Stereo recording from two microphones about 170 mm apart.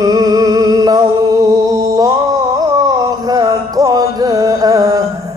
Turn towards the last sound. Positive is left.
turn(degrees=-20)  # may be behind; listen again after turning